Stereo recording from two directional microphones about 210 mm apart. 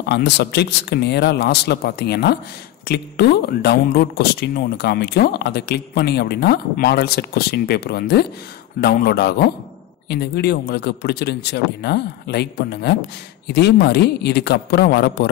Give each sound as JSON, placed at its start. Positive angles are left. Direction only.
{"t": 0.0, "sound": "speech", "side_deg": 50}